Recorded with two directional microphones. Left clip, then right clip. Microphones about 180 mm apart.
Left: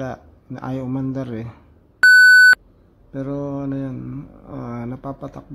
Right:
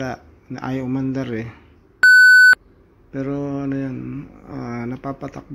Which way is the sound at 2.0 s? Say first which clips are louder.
Even; 5° right (ahead or behind).